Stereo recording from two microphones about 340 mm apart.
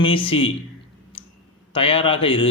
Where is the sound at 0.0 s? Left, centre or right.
Centre.